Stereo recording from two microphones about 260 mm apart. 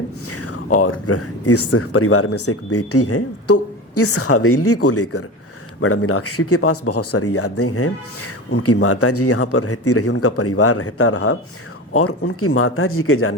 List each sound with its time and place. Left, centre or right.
0.3 s speech: left